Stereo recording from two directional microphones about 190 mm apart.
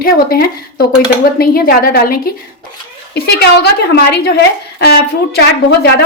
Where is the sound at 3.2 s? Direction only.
55° left (ahead or behind).